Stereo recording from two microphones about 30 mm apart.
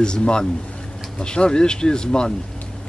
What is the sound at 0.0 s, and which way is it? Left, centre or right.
Speech, left.